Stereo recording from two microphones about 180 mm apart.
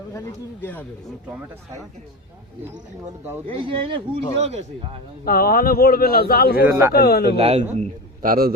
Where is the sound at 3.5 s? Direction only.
30° right (ahead or behind).